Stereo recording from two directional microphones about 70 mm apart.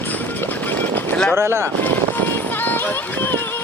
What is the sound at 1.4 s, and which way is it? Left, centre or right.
Speech, right.